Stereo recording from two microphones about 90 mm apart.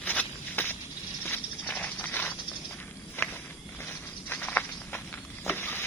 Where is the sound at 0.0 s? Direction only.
20° left (ahead or behind).